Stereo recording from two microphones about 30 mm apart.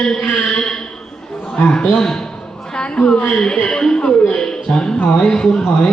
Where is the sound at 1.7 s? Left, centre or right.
Left.